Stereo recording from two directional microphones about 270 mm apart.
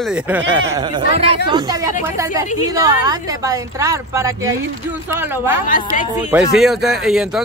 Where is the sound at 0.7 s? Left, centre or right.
Right.